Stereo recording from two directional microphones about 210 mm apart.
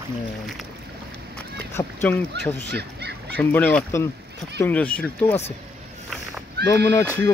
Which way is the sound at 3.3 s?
10° left (ahead or behind).